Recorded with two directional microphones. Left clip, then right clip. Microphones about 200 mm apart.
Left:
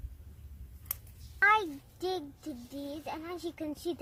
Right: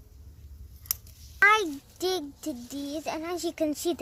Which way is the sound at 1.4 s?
60° right (ahead or behind).